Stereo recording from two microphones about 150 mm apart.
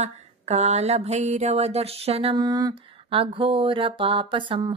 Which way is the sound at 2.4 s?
25° right (ahead or behind).